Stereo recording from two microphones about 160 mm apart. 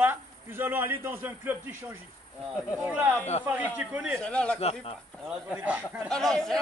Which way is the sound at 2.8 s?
15° right (ahead or behind).